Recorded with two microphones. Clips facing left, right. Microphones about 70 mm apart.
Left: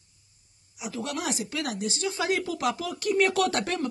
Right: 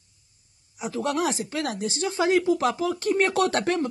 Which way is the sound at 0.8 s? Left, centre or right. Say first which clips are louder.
Right 6 dB; right.